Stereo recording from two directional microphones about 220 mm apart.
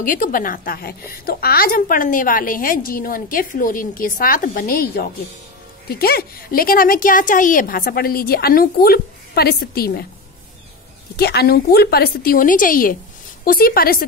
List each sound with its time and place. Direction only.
0.0 s a woman's voice: 40° left (ahead or behind)
11.1 s a woman's voice: 45° left (ahead or behind)